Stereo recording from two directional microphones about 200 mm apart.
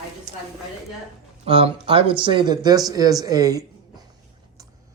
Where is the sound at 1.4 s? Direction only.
30° right (ahead or behind).